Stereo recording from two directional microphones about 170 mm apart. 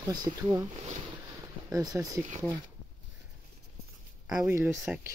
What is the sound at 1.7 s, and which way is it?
Speech, 20° right (ahead or behind).